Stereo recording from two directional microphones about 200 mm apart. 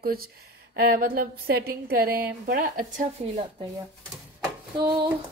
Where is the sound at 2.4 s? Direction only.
45° right (ahead or behind).